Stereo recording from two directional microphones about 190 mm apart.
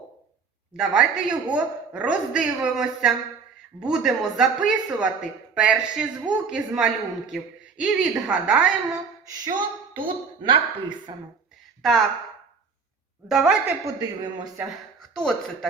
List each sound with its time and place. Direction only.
0.8 s speech: 5° right (ahead or behind)
9.2 s a woman's voice: 20° right (ahead or behind)
11.8 s speech: centre (ahead or behind)
13.2 s speech: centre (ahead or behind)
13.8 s a woman's voice: 20° right (ahead or behind)
14.9 s a sound: 5° left (ahead or behind)